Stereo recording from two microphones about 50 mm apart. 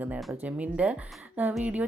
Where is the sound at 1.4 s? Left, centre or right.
Right.